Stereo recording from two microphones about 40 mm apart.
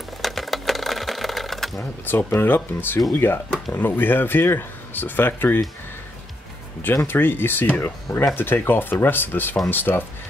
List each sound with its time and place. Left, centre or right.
0.2 s sewing machine: centre
2.0 s speech: left
7.1 s speech: left